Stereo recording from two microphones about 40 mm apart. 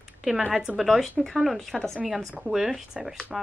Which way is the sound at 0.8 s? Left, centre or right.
Centre.